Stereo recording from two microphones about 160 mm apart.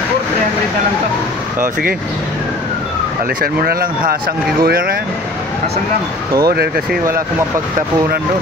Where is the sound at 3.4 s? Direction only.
70° right (ahead or behind).